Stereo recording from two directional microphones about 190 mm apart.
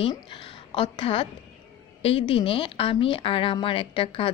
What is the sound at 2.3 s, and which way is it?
Speech, 30° left (ahead or behind).